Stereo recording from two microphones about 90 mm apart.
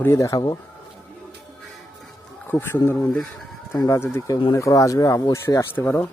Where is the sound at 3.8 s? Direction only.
30° left (ahead or behind).